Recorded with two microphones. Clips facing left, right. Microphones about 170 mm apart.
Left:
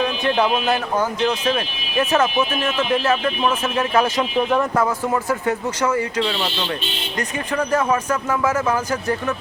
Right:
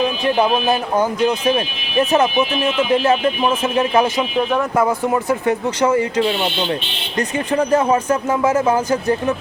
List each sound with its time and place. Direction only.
0.0 s speech: 10° right (ahead or behind)